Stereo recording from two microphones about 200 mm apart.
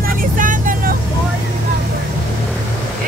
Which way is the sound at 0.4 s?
40° right (ahead or behind).